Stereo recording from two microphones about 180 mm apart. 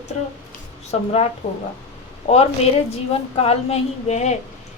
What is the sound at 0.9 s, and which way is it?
A woman's voice, 35° left (ahead or behind).